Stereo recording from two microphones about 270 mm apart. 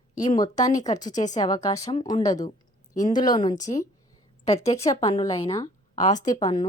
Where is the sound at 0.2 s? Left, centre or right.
Centre.